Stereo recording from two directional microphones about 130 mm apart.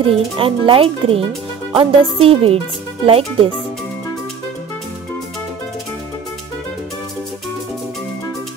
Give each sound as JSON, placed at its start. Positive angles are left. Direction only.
{"t": 0.0, "sound": "a child's voice", "side_deg": -45}